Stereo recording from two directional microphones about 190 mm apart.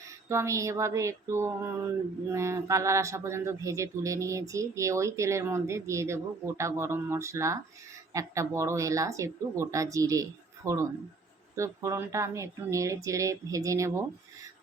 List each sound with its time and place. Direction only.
0.3 s speech: 15° right (ahead or behind)